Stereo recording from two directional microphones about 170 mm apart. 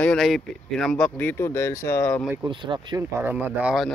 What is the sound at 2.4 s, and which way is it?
Speech, 30° right (ahead or behind).